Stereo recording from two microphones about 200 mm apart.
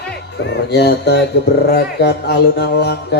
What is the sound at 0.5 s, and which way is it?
Speech, 55° left (ahead or behind).